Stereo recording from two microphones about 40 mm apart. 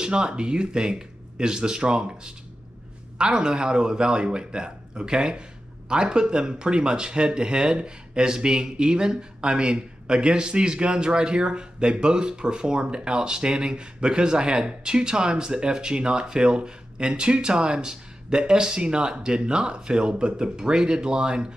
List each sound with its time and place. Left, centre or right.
0.0 s speech: right